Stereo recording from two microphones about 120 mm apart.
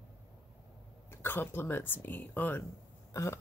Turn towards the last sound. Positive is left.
turn(degrees=25)  # may be behind; listen again after turning